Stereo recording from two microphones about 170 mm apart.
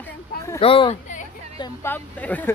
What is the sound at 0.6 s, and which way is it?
Speech, 30° left (ahead or behind).